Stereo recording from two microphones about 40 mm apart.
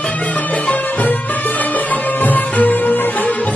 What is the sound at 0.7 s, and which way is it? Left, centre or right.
Music, left.